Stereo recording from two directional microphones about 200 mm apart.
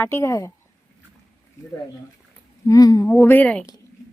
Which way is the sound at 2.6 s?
20° left (ahead or behind).